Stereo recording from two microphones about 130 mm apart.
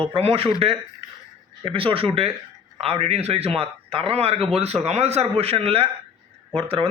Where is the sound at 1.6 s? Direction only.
45° right (ahead or behind).